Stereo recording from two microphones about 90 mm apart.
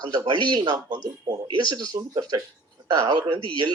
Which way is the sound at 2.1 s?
45° right (ahead or behind).